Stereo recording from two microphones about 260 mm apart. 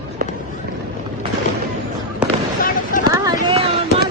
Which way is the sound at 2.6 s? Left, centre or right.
Left.